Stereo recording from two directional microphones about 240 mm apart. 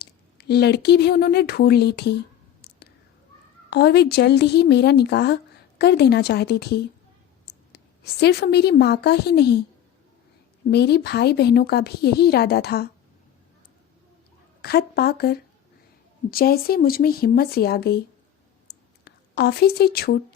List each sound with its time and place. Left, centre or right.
0.0 s speech: left
2.6 s whispering: left
3.7 s a woman's voice: left
10.7 s a woman's voice: left
14.6 s a woman's voice: left
18.7 s a sound: left
19.0 s a woman's voice: left